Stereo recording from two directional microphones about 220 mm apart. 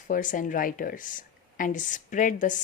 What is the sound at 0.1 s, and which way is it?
Speech, 35° left (ahead or behind).